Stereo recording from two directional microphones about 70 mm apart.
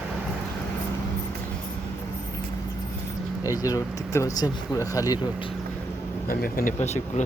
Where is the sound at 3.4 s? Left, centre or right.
Left.